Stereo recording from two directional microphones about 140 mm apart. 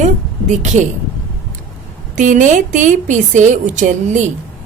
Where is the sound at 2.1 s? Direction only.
65° right (ahead or behind).